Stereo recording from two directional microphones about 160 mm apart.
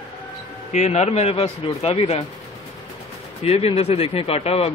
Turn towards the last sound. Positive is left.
turn(degrees=40)  # may be behind; listen again after turning